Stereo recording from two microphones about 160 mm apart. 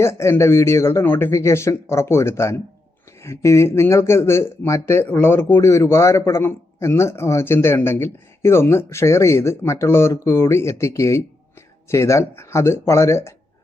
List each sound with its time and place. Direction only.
0.0 s speech: 15° left (ahead or behind)